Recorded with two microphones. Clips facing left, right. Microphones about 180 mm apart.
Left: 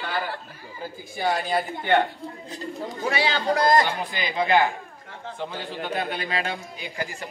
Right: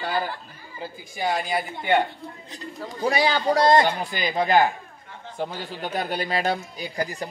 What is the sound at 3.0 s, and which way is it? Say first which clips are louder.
Speech: right 4 dB; 40° right (ahead or behind).